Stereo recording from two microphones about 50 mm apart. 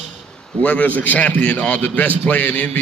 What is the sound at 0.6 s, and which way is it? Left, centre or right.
A man's voice, left.